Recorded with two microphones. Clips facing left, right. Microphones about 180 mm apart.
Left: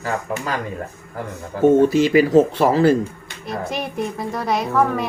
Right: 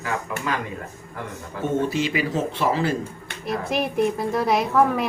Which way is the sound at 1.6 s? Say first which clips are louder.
Left 10 dB; 40° left (ahead or behind).